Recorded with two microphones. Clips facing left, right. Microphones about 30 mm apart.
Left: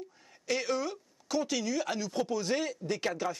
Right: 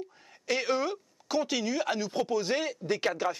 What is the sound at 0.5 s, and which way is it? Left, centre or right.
Speech, right.